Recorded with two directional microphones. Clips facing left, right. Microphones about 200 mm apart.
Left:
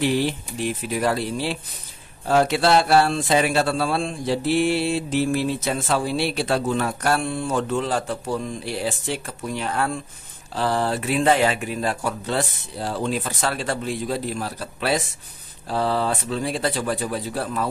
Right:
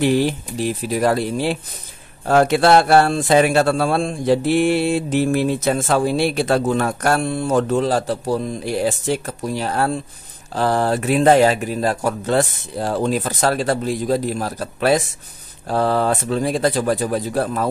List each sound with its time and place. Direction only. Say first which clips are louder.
0.0 s speech: right 5 dB; 45° right (ahead or behind)